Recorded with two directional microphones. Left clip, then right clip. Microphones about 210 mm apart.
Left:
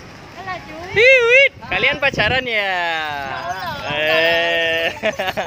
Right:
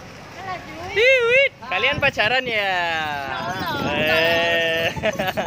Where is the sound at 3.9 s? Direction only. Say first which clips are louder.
Left 3 dB; 10° left (ahead or behind).